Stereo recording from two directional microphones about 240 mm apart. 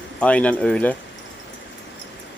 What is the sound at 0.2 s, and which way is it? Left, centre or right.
Speech, centre.